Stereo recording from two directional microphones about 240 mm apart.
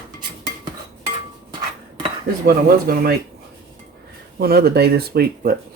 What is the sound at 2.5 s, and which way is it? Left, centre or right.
Speech, right.